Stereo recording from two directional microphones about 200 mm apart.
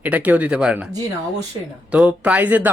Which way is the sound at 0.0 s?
10° right (ahead or behind).